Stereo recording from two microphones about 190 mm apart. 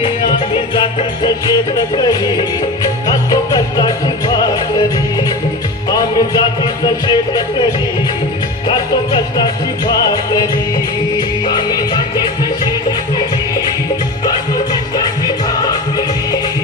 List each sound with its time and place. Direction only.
0.0 s music: 25° left (ahead or behind)
5.9 s music: 20° left (ahead or behind)
8.6 s music: 25° left (ahead or behind)